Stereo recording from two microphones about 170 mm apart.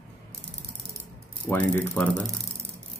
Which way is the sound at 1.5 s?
10° left (ahead or behind).